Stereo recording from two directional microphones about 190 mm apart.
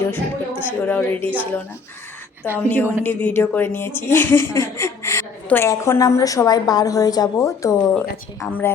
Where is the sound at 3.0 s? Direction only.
10° left (ahead or behind).